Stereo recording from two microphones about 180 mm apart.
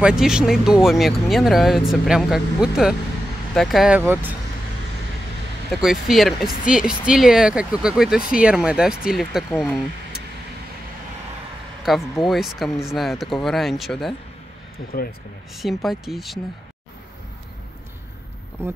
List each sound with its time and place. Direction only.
0.0 s speech: 5° right (ahead or behind)
5.7 s speech: centre (ahead or behind)
11.8 s speech: centre (ahead or behind)
14.8 s speech: 50° left (ahead or behind)
15.5 s speech: centre (ahead or behind)